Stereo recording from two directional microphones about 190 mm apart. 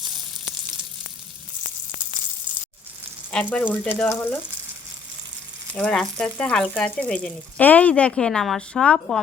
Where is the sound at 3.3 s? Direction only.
5° left (ahead or behind).